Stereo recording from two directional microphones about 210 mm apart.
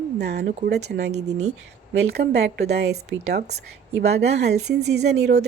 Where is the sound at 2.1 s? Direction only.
50° right (ahead or behind).